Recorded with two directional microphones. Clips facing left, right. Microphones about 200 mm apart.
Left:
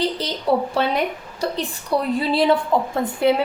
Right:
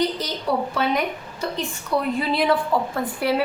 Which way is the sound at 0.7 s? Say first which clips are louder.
Left 2 dB; 30° left (ahead or behind).